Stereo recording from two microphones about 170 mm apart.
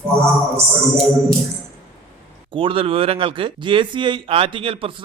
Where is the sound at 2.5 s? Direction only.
30° right (ahead or behind).